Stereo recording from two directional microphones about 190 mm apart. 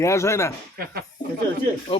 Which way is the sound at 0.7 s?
50° right (ahead or behind).